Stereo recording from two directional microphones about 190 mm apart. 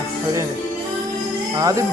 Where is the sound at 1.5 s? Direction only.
20° right (ahead or behind).